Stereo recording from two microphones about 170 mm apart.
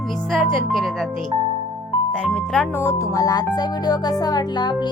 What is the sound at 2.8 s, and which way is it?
Speech, 15° left (ahead or behind).